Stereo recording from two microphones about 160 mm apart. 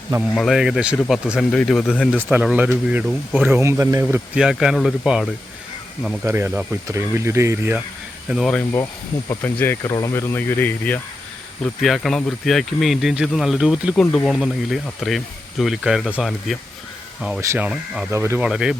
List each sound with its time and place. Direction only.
0.3 s speech: centre (ahead or behind); by 4.2 s 15° right (ahead or behind)
4.4 s speech: 5° right (ahead or behind)
6.2 s speech: 15° right (ahead or behind)
8.3 s speech: centre (ahead or behind)
9.4 s speech: 15° left (ahead or behind)
17.4 s speech: 15° right (ahead or behind)
18.4 s speech: 5° right (ahead or behind)